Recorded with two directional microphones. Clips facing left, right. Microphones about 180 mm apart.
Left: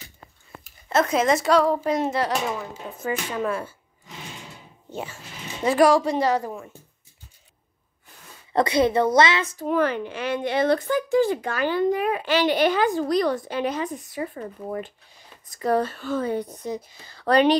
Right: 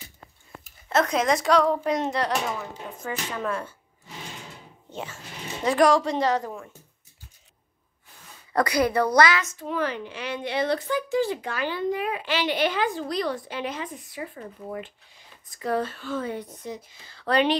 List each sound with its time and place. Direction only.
0.7 s a woman's voice: centre (ahead or behind)
5.6 s a woman's voice: 5° left (ahead or behind)
8.5 s a woman's voice: 25° left (ahead or behind)
9.7 s speech: 50° left (ahead or behind)